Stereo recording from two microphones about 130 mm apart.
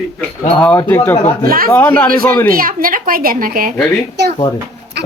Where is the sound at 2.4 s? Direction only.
90° right.